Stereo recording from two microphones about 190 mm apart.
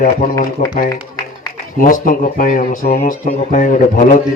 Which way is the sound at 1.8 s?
45° left (ahead or behind).